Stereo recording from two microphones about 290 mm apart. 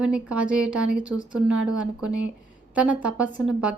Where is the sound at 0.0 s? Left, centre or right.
Centre.